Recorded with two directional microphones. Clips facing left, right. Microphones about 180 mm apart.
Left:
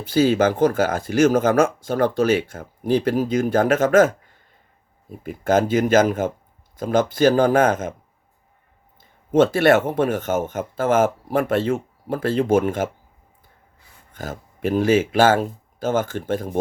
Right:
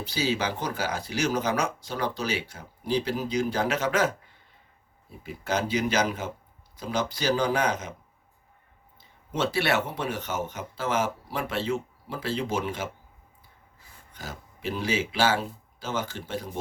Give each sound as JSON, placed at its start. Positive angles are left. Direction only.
{"t": 0.0, "sound": "speech", "side_deg": 50}
{"t": 9.0, "sound": "speech", "side_deg": 50}
{"t": 14.1, "sound": "speech", "side_deg": 50}